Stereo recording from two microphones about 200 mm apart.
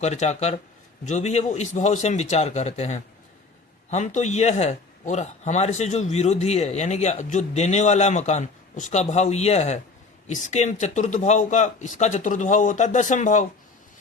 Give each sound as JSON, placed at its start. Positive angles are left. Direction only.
{"t": 0.0, "sound": "speech", "side_deg": 35}